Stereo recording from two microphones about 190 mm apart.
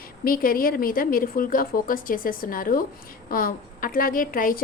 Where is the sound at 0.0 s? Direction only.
50° left (ahead or behind).